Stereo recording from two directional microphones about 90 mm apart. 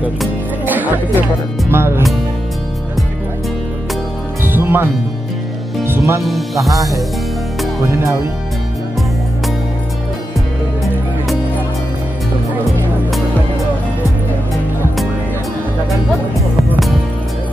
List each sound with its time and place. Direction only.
0.7 s music: 20° right (ahead or behind)
1.7 s speech: 25° right (ahead or behind)
4.5 s music: 25° right (ahead or behind)
5.9 s speech: 30° right (ahead or behind)
6.2 s music: centre (ahead or behind)
7.9 s speech: 35° right (ahead or behind)